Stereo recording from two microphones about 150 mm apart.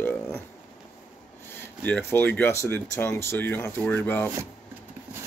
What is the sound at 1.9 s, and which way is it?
Speech, 15° left (ahead or behind).